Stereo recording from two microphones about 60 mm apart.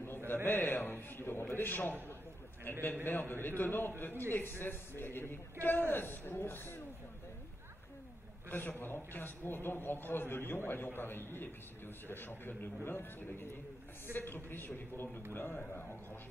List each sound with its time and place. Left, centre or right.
0.5 s a man's voice: left
8.5 s a man's voice: left